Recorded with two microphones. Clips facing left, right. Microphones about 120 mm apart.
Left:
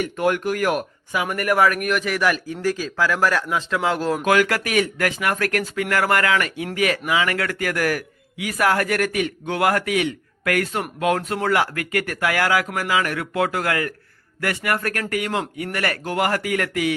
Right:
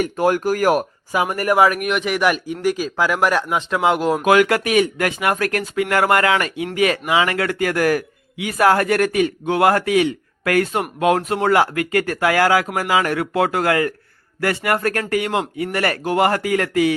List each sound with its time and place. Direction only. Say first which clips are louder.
0.0 s speech: right 3 dB; 35° right (ahead or behind)
1.5 s speech: right 3 dB; 20° right (ahead or behind)